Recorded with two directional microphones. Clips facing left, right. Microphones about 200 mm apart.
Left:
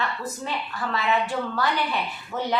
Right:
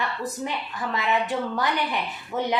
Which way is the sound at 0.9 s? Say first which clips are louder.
Even; 20° right (ahead or behind).